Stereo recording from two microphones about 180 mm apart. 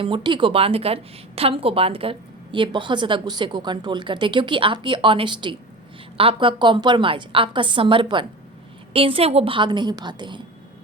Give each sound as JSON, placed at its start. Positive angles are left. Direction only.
{"t": 0.0, "sound": "speech", "side_deg": -25}